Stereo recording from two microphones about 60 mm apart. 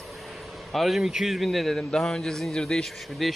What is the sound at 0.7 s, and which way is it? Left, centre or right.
A man's voice, centre.